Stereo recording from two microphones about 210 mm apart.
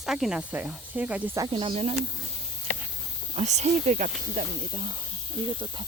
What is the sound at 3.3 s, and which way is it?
Speech, 30° right (ahead or behind).